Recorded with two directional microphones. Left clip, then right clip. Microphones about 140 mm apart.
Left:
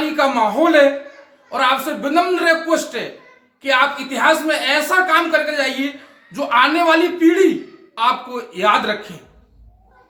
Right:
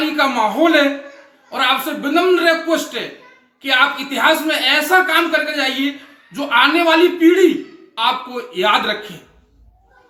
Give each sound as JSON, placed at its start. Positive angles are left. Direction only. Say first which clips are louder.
{"t": 0.2, "sound": "a man's voice", "louder": "even", "side_deg": 15}
{"t": 8.5, "sound": "speech", "louder": "even", "side_deg": 20}